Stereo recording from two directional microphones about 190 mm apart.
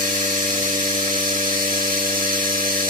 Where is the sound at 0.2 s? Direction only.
40° right (ahead or behind).